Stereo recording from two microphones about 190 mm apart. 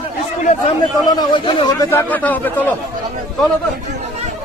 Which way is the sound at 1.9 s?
10° left (ahead or behind).